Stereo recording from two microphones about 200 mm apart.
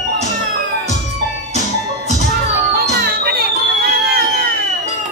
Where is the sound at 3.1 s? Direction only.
50° right (ahead or behind).